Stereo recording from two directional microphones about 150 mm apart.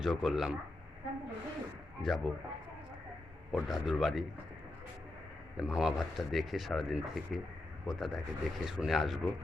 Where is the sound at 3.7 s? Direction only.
Centre (ahead or behind).